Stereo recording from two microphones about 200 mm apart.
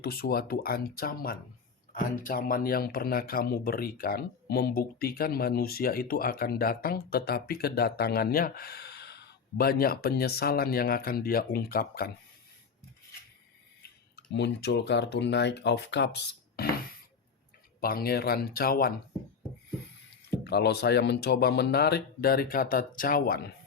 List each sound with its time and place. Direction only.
0.0 s speech: 50° left (ahead or behind)
14.3 s speech: 60° left (ahead or behind)
20.3 s speech: 55° left (ahead or behind)